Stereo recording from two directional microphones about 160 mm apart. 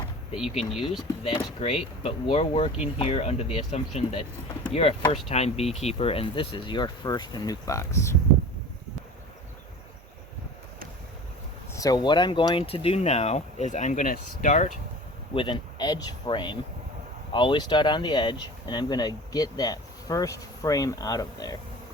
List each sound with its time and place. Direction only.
0.3 s speech: 5° right (ahead or behind)
1.2 s speech: 35° left (ahead or behind); by 8.1 s 15° left (ahead or behind)
11.7 s speech: 20° left (ahead or behind); by 14.7 s 50° left (ahead or behind)
15.4 s speech: 30° left (ahead or behind)